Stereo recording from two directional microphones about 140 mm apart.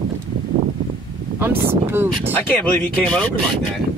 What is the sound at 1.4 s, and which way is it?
Speech, 15° right (ahead or behind).